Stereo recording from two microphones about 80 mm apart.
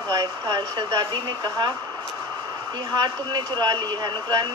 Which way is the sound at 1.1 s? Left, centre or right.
Right.